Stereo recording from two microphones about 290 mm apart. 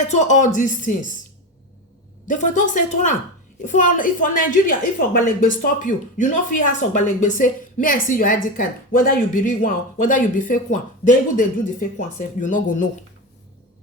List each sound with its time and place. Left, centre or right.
0.0 s speech: left
2.2 s speech: left